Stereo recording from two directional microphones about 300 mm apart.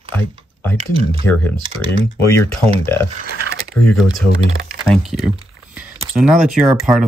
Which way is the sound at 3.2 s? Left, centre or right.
Right.